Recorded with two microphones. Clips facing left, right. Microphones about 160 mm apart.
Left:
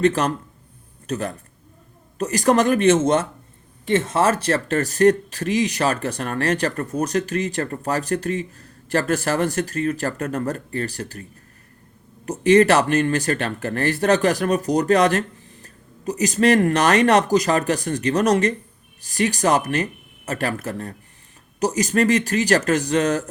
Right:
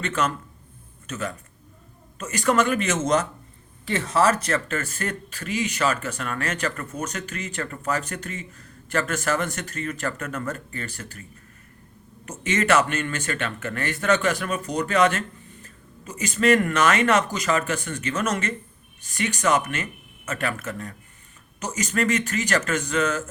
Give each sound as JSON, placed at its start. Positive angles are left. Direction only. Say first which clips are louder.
{"t": 0.0, "sound": "speech", "louder": "left 7 dB", "side_deg": 35}